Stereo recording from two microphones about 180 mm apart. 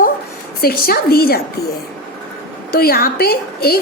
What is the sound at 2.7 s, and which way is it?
A woman's voice, 60° left (ahead or behind).